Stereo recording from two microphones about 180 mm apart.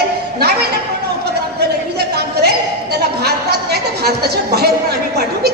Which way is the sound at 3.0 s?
65° right (ahead or behind).